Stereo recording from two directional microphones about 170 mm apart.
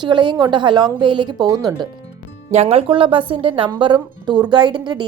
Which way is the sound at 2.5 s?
35° right (ahead or behind).